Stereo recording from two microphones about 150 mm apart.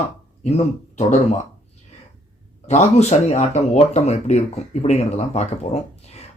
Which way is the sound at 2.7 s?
50° left (ahead or behind).